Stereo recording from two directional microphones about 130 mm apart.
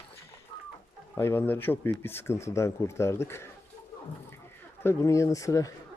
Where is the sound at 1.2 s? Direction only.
15° left (ahead or behind).